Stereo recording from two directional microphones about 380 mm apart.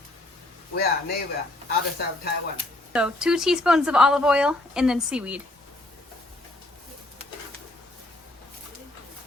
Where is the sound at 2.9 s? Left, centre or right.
Centre.